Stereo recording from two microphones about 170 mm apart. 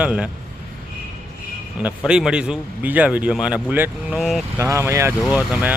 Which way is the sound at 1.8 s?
5° right (ahead or behind).